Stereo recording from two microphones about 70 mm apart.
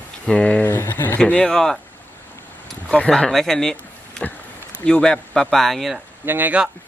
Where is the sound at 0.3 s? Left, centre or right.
Centre.